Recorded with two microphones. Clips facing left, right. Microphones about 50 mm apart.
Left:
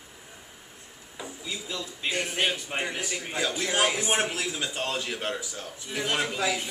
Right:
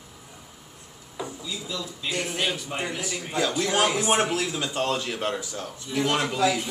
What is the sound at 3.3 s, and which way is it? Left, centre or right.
A man's voice, centre.